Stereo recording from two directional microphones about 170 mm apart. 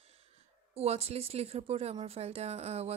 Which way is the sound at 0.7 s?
35° right (ahead or behind).